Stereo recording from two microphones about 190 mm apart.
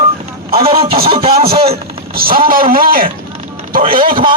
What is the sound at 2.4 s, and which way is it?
A man's voice, 50° right (ahead or behind).